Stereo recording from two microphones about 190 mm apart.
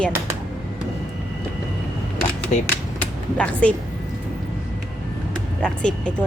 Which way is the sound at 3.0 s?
5° left (ahead or behind).